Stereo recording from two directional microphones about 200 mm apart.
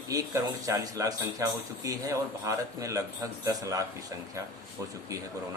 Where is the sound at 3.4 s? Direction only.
15° right (ahead or behind).